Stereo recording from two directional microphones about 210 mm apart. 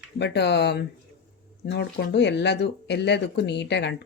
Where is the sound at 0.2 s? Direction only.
55° left (ahead or behind).